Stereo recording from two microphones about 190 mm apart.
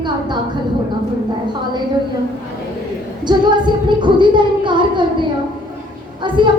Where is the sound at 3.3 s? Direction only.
25° right (ahead or behind).